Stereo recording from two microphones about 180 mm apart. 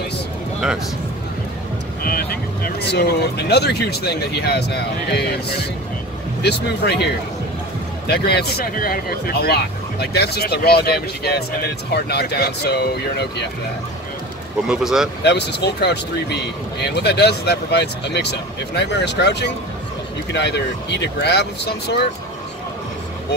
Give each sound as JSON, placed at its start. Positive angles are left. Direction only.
{"t": 2.0, "sound": "speech", "side_deg": 55}
{"t": 8.1, "sound": "speech", "side_deg": 65}
{"t": 14.7, "sound": "speech", "side_deg": -5}
{"t": 15.2, "sound": "speech", "side_deg": 70}